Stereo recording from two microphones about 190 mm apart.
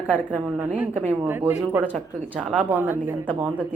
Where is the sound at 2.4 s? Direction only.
5° left (ahead or behind).